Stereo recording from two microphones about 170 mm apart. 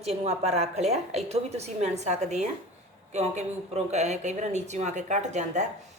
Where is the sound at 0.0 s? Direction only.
40° right (ahead or behind).